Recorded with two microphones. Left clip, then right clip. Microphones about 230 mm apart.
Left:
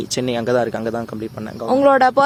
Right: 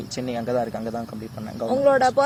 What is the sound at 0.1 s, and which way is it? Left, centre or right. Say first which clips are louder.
Speech: left 7 dB; left.